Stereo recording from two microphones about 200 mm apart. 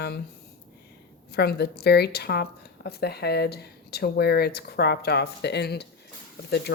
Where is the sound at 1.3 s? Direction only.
55° left (ahead or behind).